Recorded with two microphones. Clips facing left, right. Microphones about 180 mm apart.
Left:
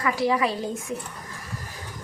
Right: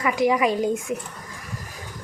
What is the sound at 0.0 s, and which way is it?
Speech, 15° right (ahead or behind).